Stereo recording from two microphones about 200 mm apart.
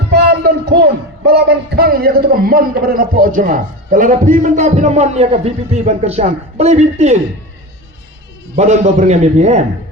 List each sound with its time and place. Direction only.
0.1 s speech: 55° right (ahead or behind); by 7.2 s 35° right (ahead or behind)
8.5 s speech: 35° right (ahead or behind)